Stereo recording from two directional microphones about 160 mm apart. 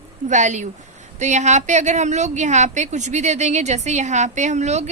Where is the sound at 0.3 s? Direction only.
50° right (ahead or behind).